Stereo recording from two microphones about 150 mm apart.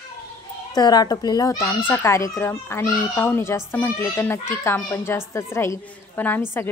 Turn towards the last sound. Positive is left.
turn(degrees=15)  # may be behind; listen again after turning